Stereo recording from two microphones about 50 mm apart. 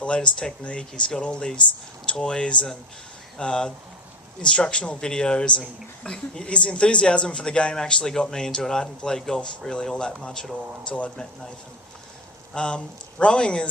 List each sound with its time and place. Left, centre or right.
0.0 s speech: left
12.5 s speech: centre